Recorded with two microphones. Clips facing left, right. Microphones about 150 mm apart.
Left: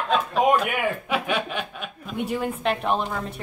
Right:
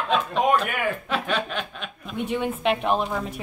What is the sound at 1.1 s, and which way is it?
A woman's voice, 10° left (ahead or behind).